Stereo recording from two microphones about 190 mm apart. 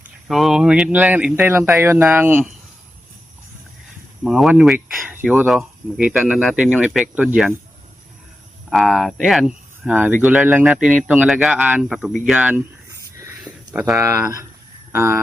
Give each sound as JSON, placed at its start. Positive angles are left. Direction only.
{"t": 0.3, "sound": "speech", "side_deg": 0}
{"t": 4.2, "sound": "speech", "side_deg": 0}
{"t": 8.7, "sound": "speech", "side_deg": 0}
{"t": 13.1, "sound": "a sound", "side_deg": -20}
{"t": 13.9, "sound": "speech", "side_deg": -15}